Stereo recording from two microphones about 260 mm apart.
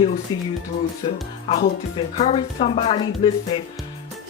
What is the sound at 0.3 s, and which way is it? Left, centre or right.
Speech, centre.